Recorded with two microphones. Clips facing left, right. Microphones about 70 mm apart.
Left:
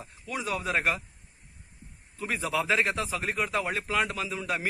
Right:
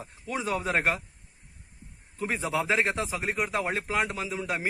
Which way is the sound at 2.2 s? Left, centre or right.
Right.